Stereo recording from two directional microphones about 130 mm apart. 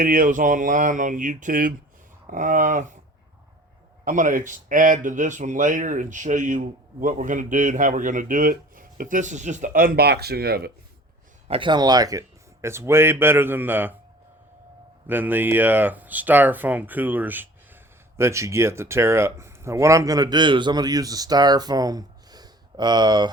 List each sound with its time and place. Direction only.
0.0 s speech: 90° right
4.0 s speech: 90° right
11.4 s a man's voice: 45° right (ahead or behind); by 13.9 s 15° right (ahead or behind)
15.0 s speech: 15° right (ahead or behind); by 23.3 s 35° right (ahead or behind)